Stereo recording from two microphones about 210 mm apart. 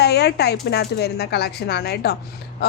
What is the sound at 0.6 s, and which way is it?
Speech, 50° left (ahead or behind).